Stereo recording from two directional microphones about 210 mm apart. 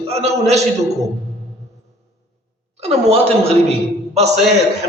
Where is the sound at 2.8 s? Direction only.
30° right (ahead or behind).